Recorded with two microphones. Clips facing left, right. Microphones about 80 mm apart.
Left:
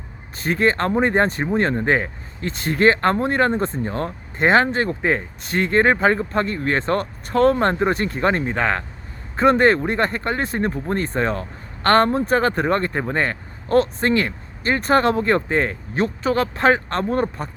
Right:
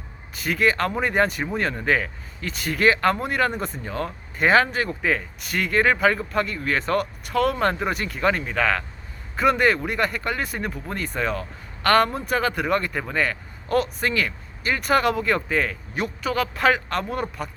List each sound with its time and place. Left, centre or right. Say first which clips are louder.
0.3 s speech: left 2 dB; left